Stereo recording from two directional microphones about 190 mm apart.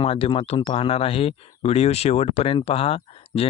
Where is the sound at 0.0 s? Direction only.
30° left (ahead or behind).